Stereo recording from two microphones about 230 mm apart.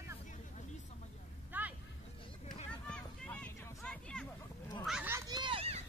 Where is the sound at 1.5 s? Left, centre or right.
Centre.